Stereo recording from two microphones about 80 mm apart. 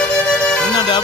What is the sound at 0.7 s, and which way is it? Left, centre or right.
Music, left.